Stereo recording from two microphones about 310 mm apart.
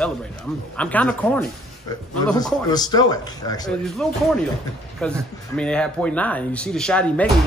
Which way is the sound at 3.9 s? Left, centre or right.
Centre.